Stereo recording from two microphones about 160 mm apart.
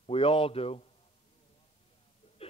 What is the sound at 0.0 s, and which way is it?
Speech, 35° left (ahead or behind).